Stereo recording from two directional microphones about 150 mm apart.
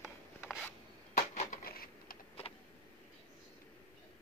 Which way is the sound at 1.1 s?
55° left (ahead or behind).